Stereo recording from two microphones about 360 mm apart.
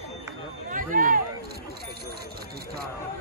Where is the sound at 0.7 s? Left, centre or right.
Right.